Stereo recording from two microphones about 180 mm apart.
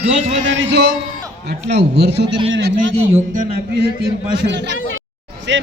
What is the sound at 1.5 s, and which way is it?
Speech, 70° right (ahead or behind).